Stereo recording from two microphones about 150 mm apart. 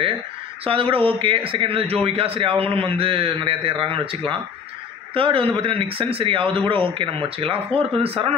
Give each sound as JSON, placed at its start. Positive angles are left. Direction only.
{"t": 0.7, "sound": "speech", "side_deg": -35}